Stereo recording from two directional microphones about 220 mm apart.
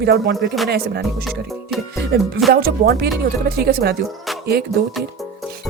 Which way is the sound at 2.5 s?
45° right (ahead or behind).